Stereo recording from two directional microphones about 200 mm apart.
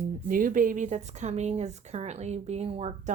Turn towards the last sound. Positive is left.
turn(degrees=-30)  # may be behind; listen again after turning